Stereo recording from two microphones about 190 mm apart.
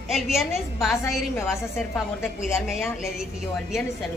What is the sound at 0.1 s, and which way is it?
A woman's voice, centre (ahead or behind).